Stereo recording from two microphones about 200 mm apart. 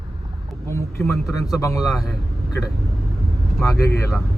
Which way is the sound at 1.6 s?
15° left (ahead or behind).